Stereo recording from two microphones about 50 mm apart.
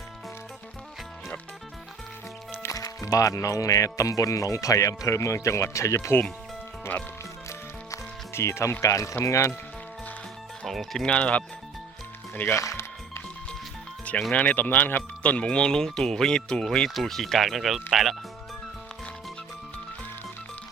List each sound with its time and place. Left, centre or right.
2.6 s speech: left
7.9 s music: left
8.8 s speech: left
10.7 s speech: centre
11.0 s speech: left
12.5 s speech: left
14.3 s speech: left; by 18.2 s centre